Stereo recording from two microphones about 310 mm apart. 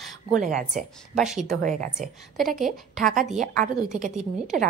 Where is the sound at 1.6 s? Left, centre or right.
Right.